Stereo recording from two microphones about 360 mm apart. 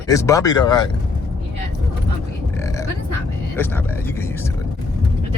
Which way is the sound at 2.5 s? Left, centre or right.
Centre.